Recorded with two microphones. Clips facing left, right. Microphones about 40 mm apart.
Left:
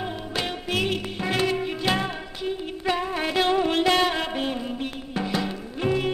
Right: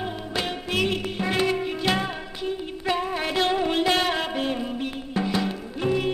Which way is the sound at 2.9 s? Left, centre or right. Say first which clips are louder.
Even; centre.